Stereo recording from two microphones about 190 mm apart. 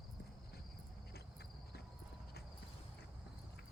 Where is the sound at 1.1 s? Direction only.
60° left (ahead or behind).